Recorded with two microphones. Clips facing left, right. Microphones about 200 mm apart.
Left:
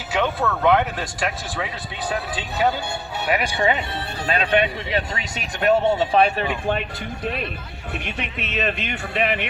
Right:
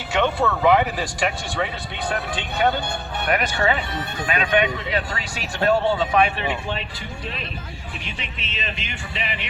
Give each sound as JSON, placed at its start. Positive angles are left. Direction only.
{"t": 0.1, "sound": "speech", "side_deg": 5}
{"t": 3.6, "sound": "speech", "side_deg": 25}
{"t": 8.0, "sound": "speech", "side_deg": 60}